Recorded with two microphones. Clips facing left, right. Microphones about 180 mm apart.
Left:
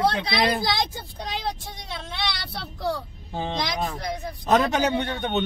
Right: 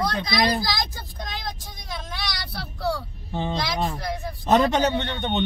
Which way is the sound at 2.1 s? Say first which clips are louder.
Left 2 dB; 25° left (ahead or behind).